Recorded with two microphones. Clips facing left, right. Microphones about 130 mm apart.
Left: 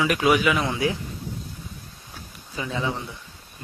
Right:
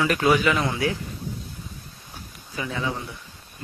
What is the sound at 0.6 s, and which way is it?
Speech, 20° left (ahead or behind).